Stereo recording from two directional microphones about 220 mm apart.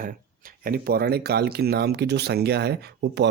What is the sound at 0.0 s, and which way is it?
Speech, 40° right (ahead or behind).